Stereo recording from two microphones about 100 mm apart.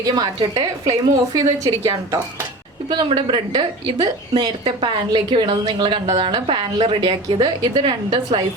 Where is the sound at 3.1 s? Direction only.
50° right (ahead or behind).